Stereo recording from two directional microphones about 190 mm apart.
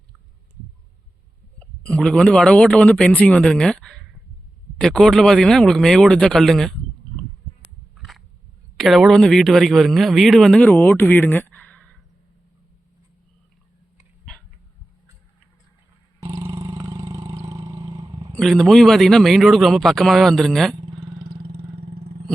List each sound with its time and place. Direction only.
1.5 s a man's voice: 5° left (ahead or behind)
7.9 s a sound: centre (ahead or behind)
8.8 s a man's voice: centre (ahead or behind)
16.2 s vehicle: 15° right (ahead or behind)
18.3 s a man's voice: centre (ahead or behind)
21.0 s vehicle: 25° right (ahead or behind)